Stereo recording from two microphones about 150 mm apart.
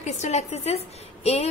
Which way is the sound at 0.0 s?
50° left (ahead or behind).